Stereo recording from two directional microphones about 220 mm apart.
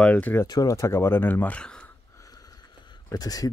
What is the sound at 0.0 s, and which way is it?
Speech, 5° left (ahead or behind).